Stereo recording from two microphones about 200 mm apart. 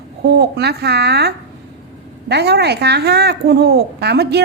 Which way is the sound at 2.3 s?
55° right (ahead or behind).